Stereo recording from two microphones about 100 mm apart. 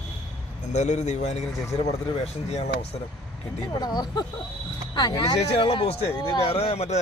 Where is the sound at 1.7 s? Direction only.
90° left.